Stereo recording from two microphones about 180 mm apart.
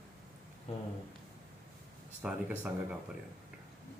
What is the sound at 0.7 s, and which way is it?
Speech, 35° left (ahead or behind).